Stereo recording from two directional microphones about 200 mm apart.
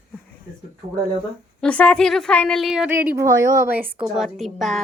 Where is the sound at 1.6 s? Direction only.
5° left (ahead or behind).